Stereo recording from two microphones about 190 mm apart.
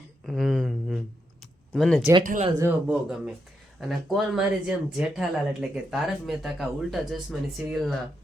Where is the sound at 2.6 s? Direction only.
5° right (ahead or behind).